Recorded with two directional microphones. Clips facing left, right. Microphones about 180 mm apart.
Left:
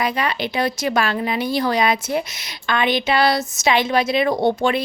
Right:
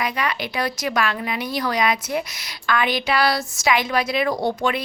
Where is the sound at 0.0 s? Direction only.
30° left (ahead or behind).